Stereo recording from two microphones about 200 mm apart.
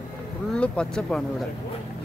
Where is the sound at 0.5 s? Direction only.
5° left (ahead or behind).